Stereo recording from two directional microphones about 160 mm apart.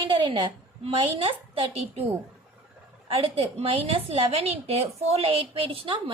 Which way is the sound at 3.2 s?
35° right (ahead or behind).